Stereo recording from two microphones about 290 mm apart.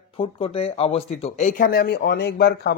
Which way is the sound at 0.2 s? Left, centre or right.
Centre.